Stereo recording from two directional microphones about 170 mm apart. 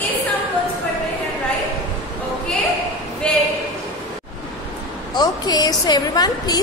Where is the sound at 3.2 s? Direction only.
5° left (ahead or behind).